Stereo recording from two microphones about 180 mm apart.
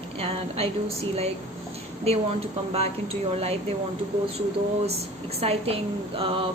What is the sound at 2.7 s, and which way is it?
A woman's voice, 35° right (ahead or behind).